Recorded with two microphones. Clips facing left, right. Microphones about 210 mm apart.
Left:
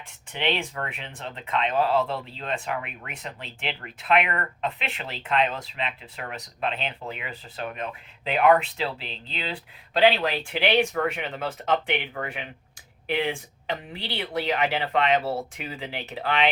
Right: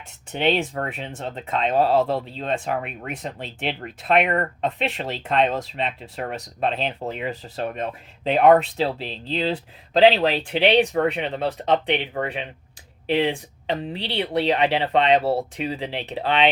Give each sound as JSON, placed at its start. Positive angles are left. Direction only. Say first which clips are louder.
{"t": 0.3, "sound": "speech", "louder": "right 6 dB", "side_deg": -40}